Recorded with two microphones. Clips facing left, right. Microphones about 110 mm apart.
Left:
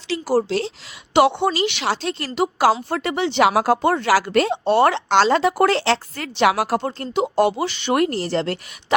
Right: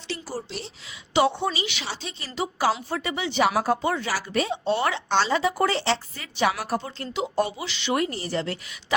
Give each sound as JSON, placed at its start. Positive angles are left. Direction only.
{"t": 0.3, "sound": "speech", "side_deg": 90}
{"t": 1.1, "sound": "speech", "side_deg": 70}
{"t": 7.3, "sound": "speech", "side_deg": 65}